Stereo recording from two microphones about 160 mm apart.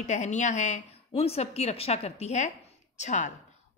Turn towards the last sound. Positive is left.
turn(degrees=50)  # may be behind; listen again after turning